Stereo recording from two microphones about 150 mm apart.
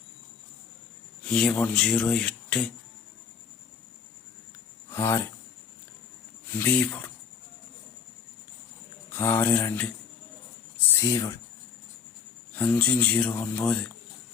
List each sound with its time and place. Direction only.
1.2 s speech: 5° left (ahead or behind)
4.9 s speech: 15° left (ahead or behind)
6.5 s speech: 15° left (ahead or behind)
9.1 s speech: 15° left (ahead or behind)
11.0 s speech: 20° left (ahead or behind)
12.5 s speech: 10° left (ahead or behind)